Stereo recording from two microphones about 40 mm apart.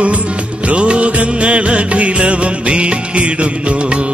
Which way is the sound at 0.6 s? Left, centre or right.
Right.